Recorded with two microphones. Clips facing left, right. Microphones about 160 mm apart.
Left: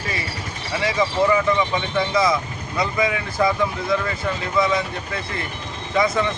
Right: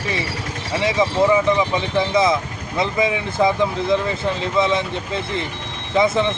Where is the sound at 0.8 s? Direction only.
20° right (ahead or behind).